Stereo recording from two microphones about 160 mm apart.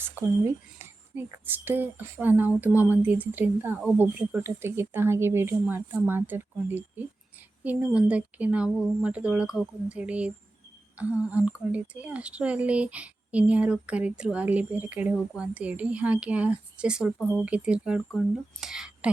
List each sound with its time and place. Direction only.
0.0 s a woman's voice: 10° right (ahead or behind)